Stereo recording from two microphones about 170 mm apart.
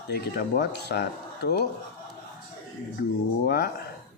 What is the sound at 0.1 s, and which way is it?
Speech, 70° left (ahead or behind).